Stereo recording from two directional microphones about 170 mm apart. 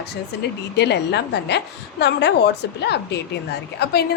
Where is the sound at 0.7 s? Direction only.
85° left.